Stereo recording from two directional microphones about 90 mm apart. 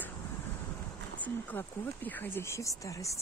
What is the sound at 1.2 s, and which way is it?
Speech, 20° left (ahead or behind).